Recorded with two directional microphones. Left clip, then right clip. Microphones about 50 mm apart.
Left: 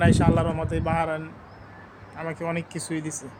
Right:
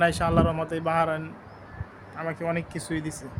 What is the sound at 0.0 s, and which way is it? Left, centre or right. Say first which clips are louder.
Speech: even; centre.